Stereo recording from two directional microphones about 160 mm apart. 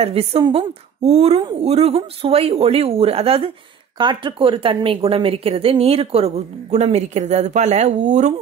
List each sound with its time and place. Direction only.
0.0 s a woman's voice: 40° right (ahead or behind)